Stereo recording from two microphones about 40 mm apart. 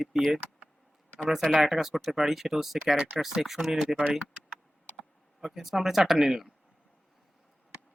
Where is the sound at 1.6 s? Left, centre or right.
Centre.